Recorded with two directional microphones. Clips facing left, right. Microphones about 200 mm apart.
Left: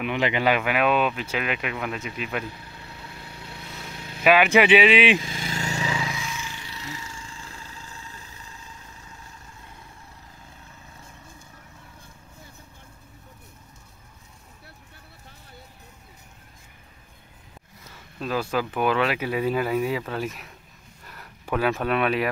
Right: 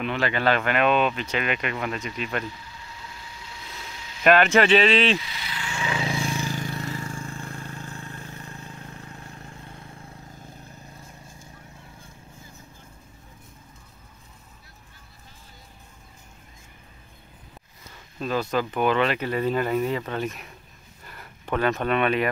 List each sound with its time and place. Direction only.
0.0 s speech: 15° left (ahead or behind)
2.4 s vehicle: 60° left (ahead or behind)
4.2 s speech: 10° left (ahead or behind)
5.2 s vehicle: 45° left (ahead or behind)
5.9 s vehicle: 30° right (ahead or behind); by 9.6 s 55° right (ahead or behind)
18.2 s speech: 5° left (ahead or behind)
21.0 s a sound: centre (ahead or behind)